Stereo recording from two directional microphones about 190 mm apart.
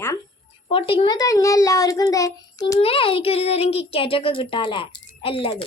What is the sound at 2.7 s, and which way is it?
Speech, 30° left (ahead or behind).